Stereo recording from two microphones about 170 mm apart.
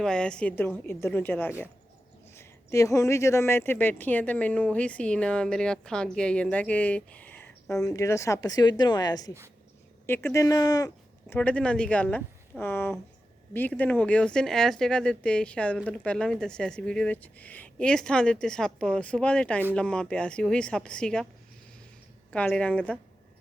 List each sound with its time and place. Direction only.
0.0 s speech: 5° left (ahead or behind); by 11.3 s 20° left (ahead or behind)
11.3 s speech: 5° left (ahead or behind)
22.3 s speech: 5° left (ahead or behind)